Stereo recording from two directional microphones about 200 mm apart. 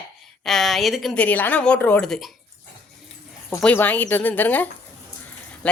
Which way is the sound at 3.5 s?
10° left (ahead or behind).